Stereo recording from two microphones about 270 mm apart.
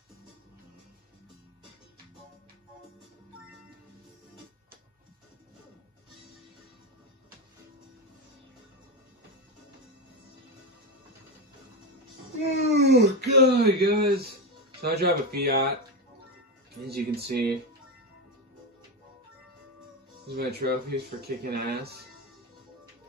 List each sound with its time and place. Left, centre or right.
12.6 s speech: right
16.8 s speech: right
20.3 s speech: right